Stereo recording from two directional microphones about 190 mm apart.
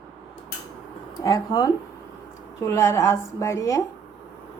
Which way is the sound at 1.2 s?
20° left (ahead or behind).